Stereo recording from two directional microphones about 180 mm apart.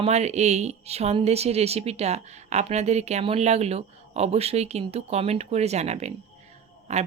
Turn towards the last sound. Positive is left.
turn(degrees=-40)  # may be behind; listen again after turning